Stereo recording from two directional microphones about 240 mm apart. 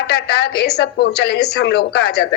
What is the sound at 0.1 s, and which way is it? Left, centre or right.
A man's voice, left.